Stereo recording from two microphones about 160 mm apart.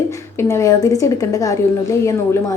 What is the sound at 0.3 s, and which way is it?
A woman's voice, 15° left (ahead or behind).